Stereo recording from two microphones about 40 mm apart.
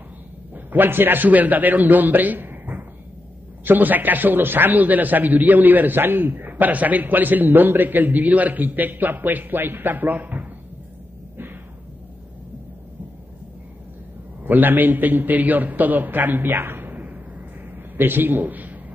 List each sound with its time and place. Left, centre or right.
0.7 s a man's voice: right
14.4 s a man's voice: right
16.9 s a sound: right
17.9 s a man's voice: right